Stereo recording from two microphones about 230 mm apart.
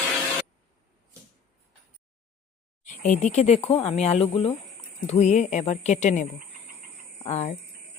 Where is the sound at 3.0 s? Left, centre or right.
Left.